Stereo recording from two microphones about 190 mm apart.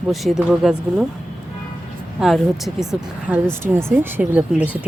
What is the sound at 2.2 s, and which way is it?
Speech, centre (ahead or behind).